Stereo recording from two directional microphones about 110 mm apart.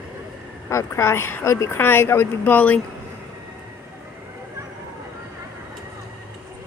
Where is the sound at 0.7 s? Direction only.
25° left (ahead or behind).